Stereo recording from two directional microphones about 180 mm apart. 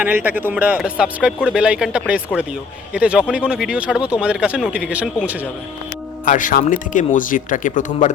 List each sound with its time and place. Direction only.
0.0 s a man's voice: 10° right (ahead or behind)
6.2 s speech: 45° left (ahead or behind)